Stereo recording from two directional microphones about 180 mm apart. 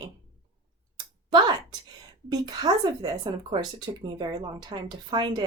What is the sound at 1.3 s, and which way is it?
A woman's voice, 25° right (ahead or behind).